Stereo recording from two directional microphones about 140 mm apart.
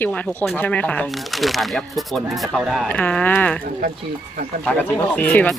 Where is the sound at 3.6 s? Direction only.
90° right.